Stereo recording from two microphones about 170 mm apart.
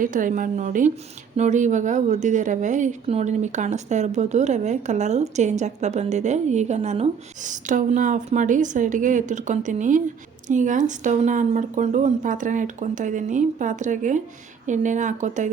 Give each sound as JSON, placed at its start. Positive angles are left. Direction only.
{"t": 0.0, "sound": "a woman's voice", "side_deg": -50}